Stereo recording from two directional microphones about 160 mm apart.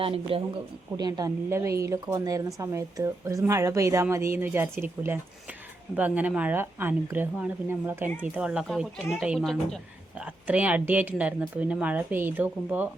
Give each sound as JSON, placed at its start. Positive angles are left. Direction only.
{"t": 0.0, "sound": "a woman's voice", "side_deg": -35}
{"t": 10.2, "sound": "a woman's voice", "side_deg": -10}